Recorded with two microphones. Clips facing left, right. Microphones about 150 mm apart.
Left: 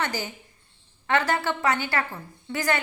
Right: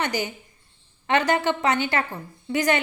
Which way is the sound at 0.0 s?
20° right (ahead or behind).